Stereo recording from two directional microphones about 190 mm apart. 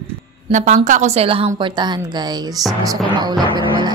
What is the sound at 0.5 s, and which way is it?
A woman's voice, 40° right (ahead or behind).